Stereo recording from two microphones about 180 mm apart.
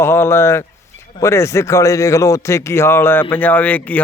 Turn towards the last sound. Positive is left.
turn(degrees=10)  # may be behind; listen again after turning